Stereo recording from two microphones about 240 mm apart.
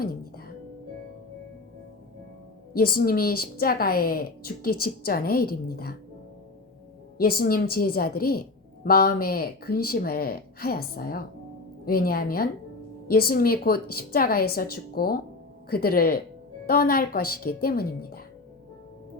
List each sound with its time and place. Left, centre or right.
0.0 s music: left
2.9 s a woman's voice: left
7.2 s a woman's voice: left